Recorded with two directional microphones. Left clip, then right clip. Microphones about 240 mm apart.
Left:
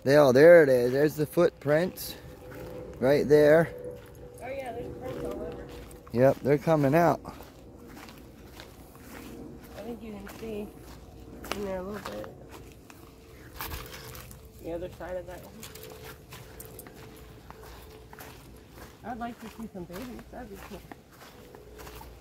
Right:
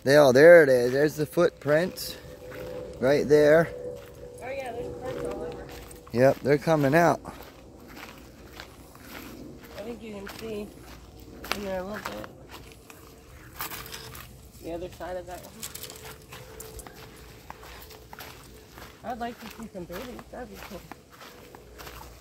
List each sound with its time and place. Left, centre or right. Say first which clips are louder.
0.0 s speech: right 2 dB; centre
4.4 s clip-clop: right 2 dB; centre
6.1 s speech: right 2 dB; centre
11.5 s a sound: right 3 dB; centre
14.7 s speech: right 1 dB; centre
19.0 s speech: right 3 dB; right